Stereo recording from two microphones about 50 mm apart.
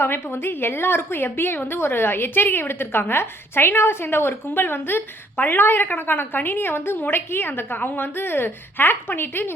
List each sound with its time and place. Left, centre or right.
0.0 s a woman's voice: left